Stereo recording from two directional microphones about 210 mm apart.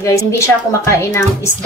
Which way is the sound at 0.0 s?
15° left (ahead or behind).